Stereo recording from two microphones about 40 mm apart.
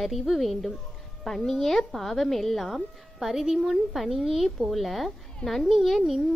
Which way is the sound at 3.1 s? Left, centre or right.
Centre.